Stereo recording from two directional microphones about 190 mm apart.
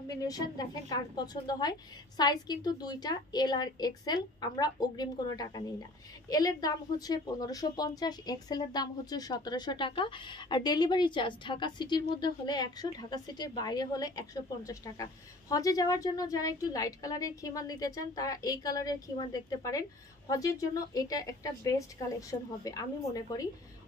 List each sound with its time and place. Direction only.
0.1 s a woman's voice: 20° left (ahead or behind)